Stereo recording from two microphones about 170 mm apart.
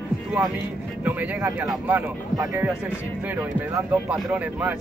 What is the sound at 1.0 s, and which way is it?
Speech, 10° right (ahead or behind).